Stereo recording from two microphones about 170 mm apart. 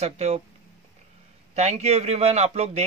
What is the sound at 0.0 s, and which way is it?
Speech, 40° right (ahead or behind).